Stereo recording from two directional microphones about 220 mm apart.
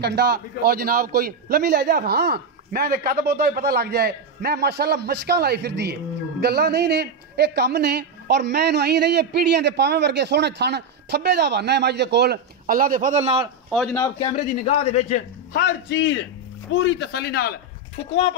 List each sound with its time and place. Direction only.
0.0 s a man's voice: 45° right (ahead or behind); by 13.5 s 25° right (ahead or behind)
13.7 s a man's voice: centre (ahead or behind)
13.9 s a man's voice: 15° left (ahead or behind)
14.3 s a man's voice: 30° left (ahead or behind)
15.5 s a man's voice: 50° left (ahead or behind)